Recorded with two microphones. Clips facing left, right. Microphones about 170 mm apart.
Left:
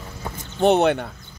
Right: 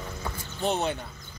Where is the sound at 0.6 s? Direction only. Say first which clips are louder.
Left 11 dB; 70° left (ahead or behind).